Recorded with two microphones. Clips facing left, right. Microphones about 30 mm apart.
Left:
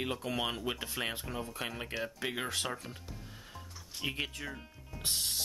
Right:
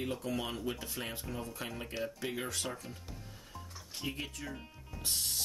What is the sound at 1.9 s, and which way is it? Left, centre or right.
Speech, centre.